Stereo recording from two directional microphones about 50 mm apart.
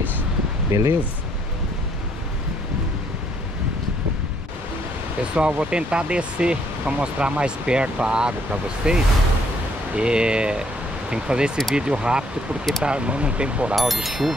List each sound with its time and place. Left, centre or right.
0.7 s speech: right
5.3 s speech: right